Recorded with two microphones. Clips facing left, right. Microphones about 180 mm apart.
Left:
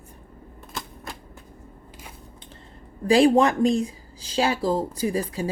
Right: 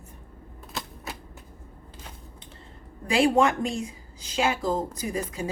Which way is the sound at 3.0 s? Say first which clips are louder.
Left 4 dB; 35° left (ahead or behind).